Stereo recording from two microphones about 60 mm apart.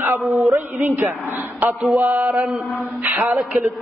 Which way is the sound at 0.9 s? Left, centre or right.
Right.